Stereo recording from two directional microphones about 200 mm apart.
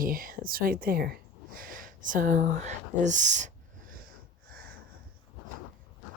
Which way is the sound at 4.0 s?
45° right (ahead or behind).